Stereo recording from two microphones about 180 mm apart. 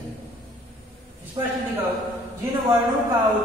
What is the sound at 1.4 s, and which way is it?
Speech, 25° right (ahead or behind).